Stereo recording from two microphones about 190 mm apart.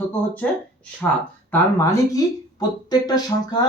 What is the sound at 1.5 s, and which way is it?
Speech, 15° left (ahead or behind).